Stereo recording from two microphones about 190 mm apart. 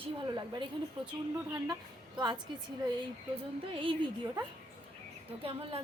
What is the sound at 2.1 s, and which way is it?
Speech, 20° right (ahead or behind).